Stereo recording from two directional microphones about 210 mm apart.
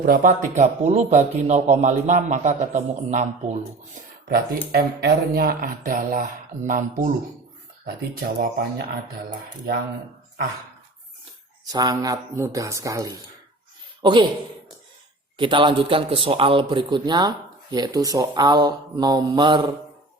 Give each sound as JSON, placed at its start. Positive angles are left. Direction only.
{"t": 0.0, "sound": "speech", "side_deg": -45}
{"t": 4.7, "sound": "speech", "side_deg": -50}
{"t": 11.6, "sound": "speech", "side_deg": -20}
{"t": 15.4, "sound": "a man's voice", "side_deg": -25}